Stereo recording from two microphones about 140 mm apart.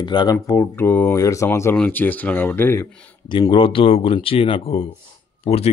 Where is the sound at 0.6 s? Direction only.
15° left (ahead or behind).